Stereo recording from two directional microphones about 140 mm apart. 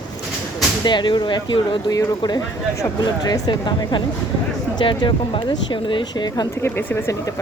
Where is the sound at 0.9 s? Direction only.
35° left (ahead or behind).